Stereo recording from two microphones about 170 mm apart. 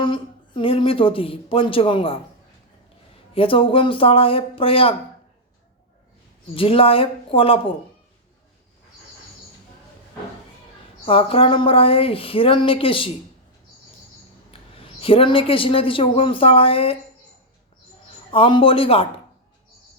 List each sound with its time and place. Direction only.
0.0 s a woman's voice: 30° left (ahead or behind)
3.3 s a woman's voice: 30° left (ahead or behind)
6.6 s a woman's voice: 35° left (ahead or behind)
11.0 s a woman's voice: 30° left (ahead or behind)
14.5 s a man's voice: 35° left (ahead or behind)
18.3 s a woman's voice: 30° left (ahead or behind)